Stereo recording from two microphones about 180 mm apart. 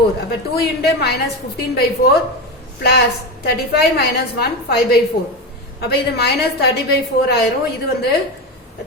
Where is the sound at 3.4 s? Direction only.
60° left (ahead or behind).